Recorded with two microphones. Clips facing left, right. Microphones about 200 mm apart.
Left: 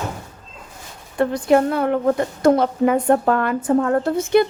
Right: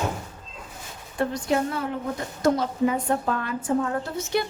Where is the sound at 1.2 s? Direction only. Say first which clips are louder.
Left 8 dB; 60° left (ahead or behind).